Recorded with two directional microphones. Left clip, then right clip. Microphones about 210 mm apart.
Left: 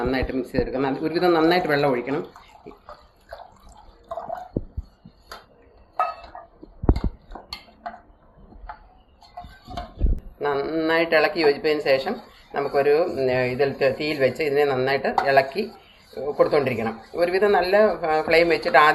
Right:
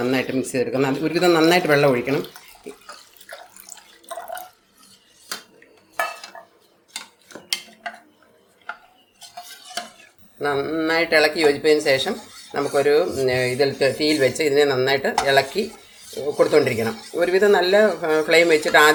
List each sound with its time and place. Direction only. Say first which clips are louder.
0.0 s speech: right 3 dB; 55° right (ahead or behind)
10.4 s speech: right 1 dB; 35° right (ahead or behind)